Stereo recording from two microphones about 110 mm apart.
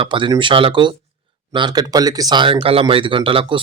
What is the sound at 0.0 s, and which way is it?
A man's voice, 50° right (ahead or behind).